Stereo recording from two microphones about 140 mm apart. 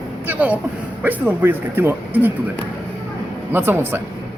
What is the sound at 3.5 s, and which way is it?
Speech, 15° right (ahead or behind).